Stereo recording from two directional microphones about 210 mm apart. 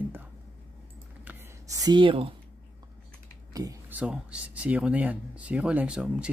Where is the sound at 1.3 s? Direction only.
15° right (ahead or behind).